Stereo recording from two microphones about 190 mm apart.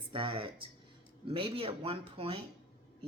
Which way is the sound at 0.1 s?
25° right (ahead or behind).